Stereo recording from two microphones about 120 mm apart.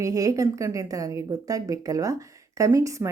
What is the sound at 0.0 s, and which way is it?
Speech, 30° right (ahead or behind).